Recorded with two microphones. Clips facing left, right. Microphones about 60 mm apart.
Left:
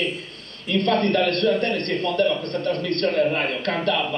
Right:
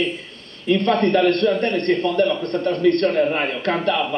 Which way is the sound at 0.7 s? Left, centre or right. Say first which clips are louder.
Right 3 dB; centre.